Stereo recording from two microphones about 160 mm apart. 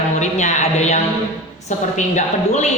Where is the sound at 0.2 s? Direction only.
45° left (ahead or behind).